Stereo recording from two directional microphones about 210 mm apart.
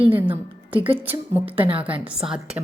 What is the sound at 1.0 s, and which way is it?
A woman's voice, 10° right (ahead or behind).